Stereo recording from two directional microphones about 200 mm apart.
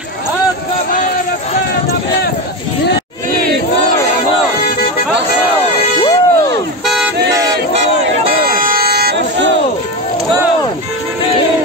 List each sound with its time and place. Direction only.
6.0 s music: 20° left (ahead or behind)
8.5 s music: 45° right (ahead or behind)